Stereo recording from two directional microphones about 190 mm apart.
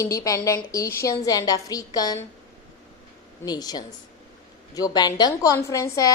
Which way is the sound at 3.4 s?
20° left (ahead or behind).